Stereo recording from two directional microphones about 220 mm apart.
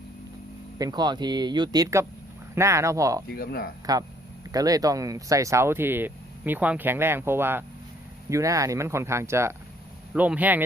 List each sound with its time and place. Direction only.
0.8 s speech: 20° right (ahead or behind)
3.2 s speech: 45° left (ahead or behind)
4.5 s speech: 15° right (ahead or behind)